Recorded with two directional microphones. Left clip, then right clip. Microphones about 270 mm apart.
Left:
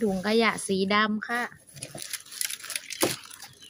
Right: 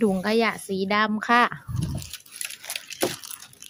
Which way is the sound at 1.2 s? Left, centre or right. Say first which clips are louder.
Right 11 dB; centre.